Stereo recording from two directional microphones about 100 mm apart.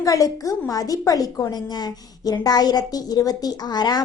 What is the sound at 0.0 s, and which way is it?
A woman's voice, 35° left (ahead or behind).